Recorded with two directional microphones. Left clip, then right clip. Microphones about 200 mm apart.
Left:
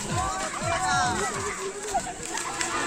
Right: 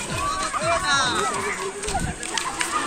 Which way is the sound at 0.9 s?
50° left (ahead or behind).